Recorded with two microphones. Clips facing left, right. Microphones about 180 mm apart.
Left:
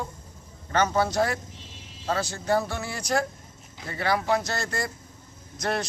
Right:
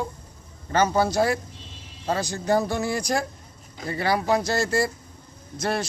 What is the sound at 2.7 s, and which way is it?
Speech, 40° right (ahead or behind).